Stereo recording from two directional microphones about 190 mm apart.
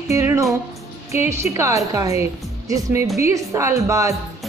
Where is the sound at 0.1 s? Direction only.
15° right (ahead or behind).